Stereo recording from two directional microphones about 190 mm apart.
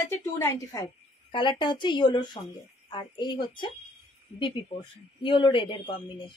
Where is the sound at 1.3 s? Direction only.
25° left (ahead or behind).